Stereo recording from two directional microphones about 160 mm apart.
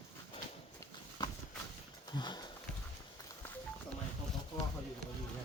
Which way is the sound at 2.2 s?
25° left (ahead or behind).